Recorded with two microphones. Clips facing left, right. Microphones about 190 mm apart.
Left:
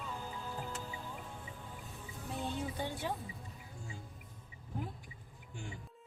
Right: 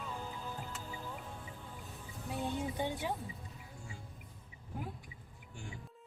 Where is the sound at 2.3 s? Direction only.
15° right (ahead or behind).